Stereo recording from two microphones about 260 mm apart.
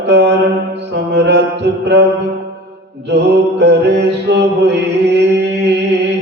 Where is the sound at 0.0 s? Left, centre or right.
Right.